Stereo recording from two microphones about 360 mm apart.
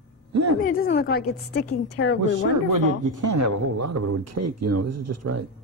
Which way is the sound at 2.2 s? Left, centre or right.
Right.